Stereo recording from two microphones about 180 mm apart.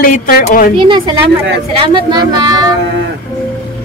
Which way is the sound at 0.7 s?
25° right (ahead or behind).